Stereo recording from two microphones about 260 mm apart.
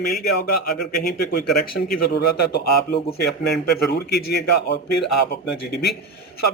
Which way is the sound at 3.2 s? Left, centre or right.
Left.